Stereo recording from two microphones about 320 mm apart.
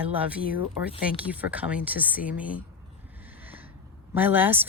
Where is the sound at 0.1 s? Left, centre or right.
Centre.